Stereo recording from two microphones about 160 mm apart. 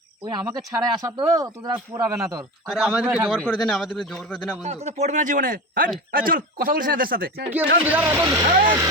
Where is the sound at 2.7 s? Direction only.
Centre (ahead or behind).